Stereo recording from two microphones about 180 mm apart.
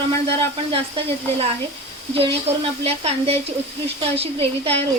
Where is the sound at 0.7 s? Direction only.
35° right (ahead or behind).